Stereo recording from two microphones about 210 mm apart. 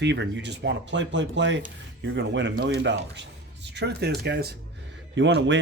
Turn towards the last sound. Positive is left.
turn(degrees=-60)  # may be behind; listen again after turning